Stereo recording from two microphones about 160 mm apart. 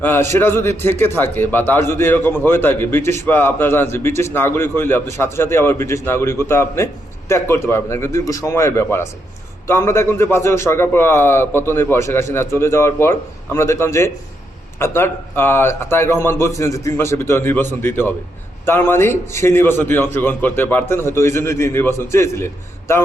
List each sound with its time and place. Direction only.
0.0 s a man's voice: 15° left (ahead or behind)